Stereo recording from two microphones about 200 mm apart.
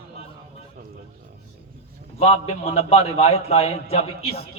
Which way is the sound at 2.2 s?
30° left (ahead or behind).